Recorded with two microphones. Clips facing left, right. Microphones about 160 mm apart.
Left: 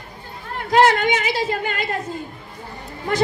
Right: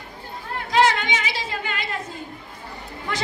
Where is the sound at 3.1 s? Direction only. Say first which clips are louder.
Left 9 dB; 45° left (ahead or behind).